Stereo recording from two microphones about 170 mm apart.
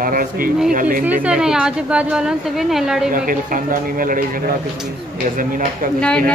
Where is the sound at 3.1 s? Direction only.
55° right (ahead or behind).